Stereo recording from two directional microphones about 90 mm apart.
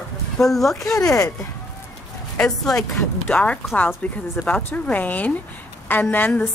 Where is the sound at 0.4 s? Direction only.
5° left (ahead or behind).